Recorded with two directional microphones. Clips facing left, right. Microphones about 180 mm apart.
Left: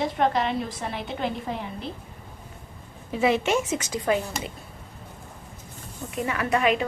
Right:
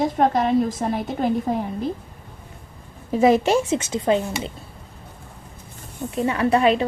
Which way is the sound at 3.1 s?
40° right (ahead or behind).